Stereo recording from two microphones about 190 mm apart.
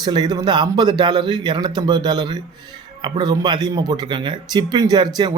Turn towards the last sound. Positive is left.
turn(degrees=-25)  # may be behind; listen again after turning